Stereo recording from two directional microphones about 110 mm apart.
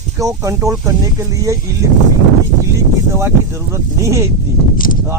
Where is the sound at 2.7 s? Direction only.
25° right (ahead or behind).